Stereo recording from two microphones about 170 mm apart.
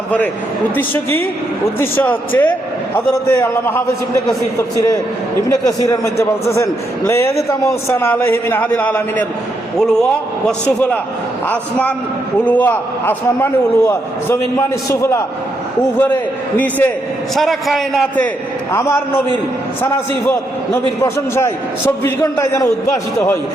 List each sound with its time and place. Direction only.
0.8 s a man's voice: 10° left (ahead or behind)
18.7 s a man's voice: 15° left (ahead or behind)
21.0 s a man's voice: 15° left (ahead or behind)